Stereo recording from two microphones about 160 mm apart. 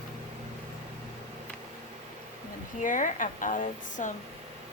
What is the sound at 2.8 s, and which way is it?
A woman's voice, 55° left (ahead or behind).